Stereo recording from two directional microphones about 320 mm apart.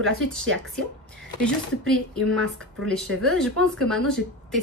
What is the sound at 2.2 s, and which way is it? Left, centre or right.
A woman's voice, centre.